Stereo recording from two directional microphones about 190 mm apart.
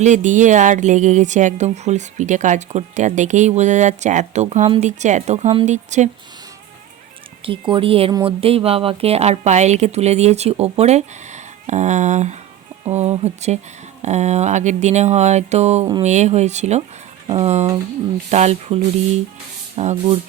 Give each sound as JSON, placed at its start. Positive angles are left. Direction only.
{"t": 0.0, "sound": "a woman's voice", "side_deg": -40}
{"t": 7.4, "sound": "a woman's voice", "side_deg": -25}